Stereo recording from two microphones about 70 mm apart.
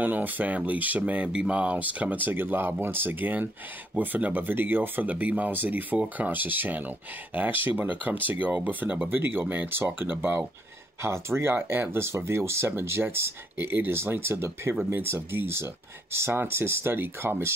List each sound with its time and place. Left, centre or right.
0.0 s speech: right
11.0 s speech: right